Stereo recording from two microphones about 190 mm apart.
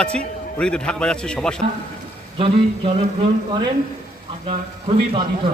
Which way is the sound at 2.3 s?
30° right (ahead or behind).